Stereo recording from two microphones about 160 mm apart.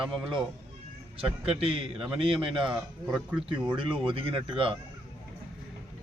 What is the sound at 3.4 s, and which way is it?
Speech, 30° right (ahead or behind).